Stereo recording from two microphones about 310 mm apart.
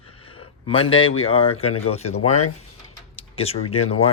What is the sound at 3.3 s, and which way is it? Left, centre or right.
Speech, centre.